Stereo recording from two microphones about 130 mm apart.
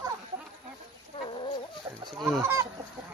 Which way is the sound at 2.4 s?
20° right (ahead or behind).